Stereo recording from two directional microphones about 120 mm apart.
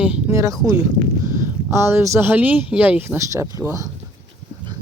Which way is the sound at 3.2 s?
25° right (ahead or behind).